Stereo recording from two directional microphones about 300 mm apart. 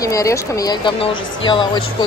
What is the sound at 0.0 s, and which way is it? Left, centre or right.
Speech, centre.